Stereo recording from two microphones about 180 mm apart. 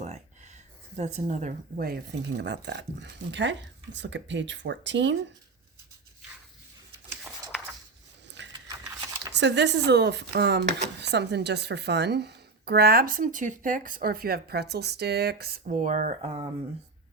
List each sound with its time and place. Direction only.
0.9 s a woman's voice: 40° right (ahead or behind)
2.4 s speech: 75° right (ahead or behind)
8.5 s a sound: 20° right (ahead or behind)
9.3 s a woman's voice: 75° right (ahead or behind); by 16.4 s 45° right (ahead or behind)